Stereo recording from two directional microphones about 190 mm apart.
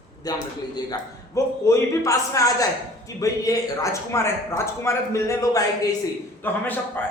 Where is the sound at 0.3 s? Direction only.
20° left (ahead or behind).